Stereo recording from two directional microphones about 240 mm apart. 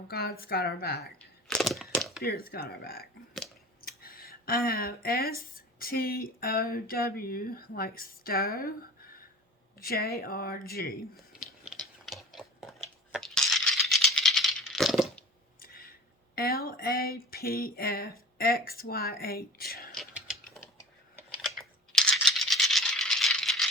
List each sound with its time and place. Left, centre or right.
0.1 s speech: left
1.5 s a sound: centre
2.2 s speech: left
11.3 s a sound: centre
13.1 s rattle: centre
15.6 s speech: left
19.9 s mechanisms: centre
21.6 s rattle: centre